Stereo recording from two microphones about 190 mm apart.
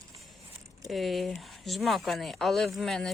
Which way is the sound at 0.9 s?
Centre (ahead or behind).